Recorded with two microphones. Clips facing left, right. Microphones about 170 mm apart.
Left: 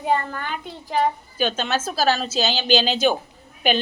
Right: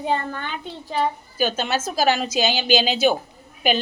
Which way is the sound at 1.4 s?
10° right (ahead or behind).